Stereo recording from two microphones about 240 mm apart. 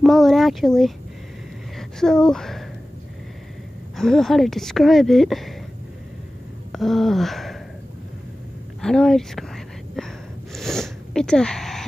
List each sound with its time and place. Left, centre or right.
0.0 s speech: centre
3.9 s speech: centre
6.7 s speech: centre
8.8 s speech: centre
9.9 s sneeze: centre